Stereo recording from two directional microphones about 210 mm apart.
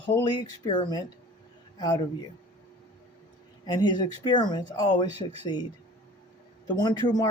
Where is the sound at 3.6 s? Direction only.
20° left (ahead or behind).